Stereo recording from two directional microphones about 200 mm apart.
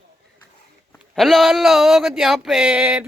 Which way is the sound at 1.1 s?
Centre (ahead or behind).